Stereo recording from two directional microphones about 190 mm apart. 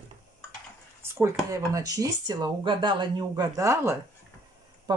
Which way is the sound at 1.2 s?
15° right (ahead or behind).